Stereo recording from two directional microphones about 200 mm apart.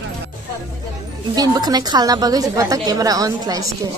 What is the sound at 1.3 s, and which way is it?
A woman's voice, 20° right (ahead or behind).